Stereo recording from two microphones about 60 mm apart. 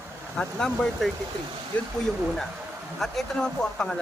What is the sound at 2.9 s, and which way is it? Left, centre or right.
Speech, centre.